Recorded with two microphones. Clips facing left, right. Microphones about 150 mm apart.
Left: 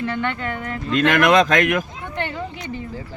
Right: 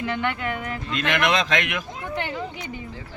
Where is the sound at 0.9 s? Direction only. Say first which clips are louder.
Left 7 dB; 45° left (ahead or behind).